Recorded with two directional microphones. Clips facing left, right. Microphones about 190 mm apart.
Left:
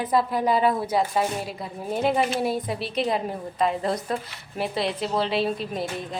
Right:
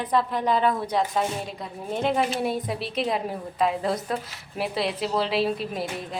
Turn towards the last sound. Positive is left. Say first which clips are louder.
# left 1 dB
turn(degrees=0)  # may be behind; listen again after turning